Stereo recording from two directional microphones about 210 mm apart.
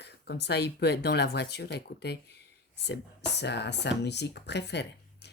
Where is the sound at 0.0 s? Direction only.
50° left (ahead or behind).